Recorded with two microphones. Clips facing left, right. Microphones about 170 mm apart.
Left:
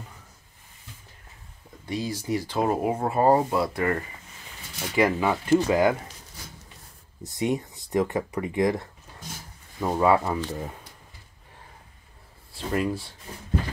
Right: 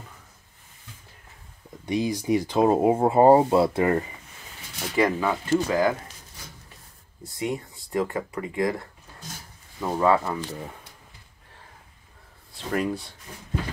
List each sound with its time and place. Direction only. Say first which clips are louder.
1.9 s speech: right 5 dB; 15° right (ahead or behind)
4.9 s speech: even; 5° left (ahead or behind)
7.2 s speech: left 3 dB; 20° left (ahead or behind)
12.5 s speech: even; centre (ahead or behind)